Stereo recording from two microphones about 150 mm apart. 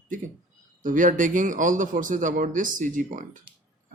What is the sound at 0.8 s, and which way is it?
A man's voice, 60° right (ahead or behind).